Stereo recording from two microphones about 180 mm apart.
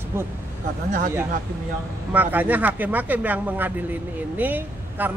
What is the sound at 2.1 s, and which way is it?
A woman's voice, 10° right (ahead or behind).